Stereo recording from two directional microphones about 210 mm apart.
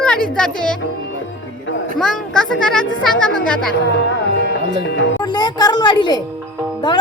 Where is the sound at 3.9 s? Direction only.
60° left (ahead or behind).